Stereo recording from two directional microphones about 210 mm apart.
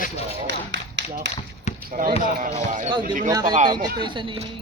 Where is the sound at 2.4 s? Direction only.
35° right (ahead or behind).